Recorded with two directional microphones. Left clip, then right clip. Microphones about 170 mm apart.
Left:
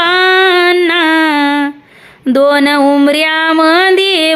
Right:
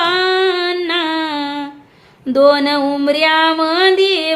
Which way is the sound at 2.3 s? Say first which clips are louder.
Left 2 dB; 40° left (ahead or behind).